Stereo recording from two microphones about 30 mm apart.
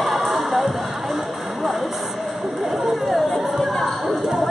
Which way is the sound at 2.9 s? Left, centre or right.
Centre.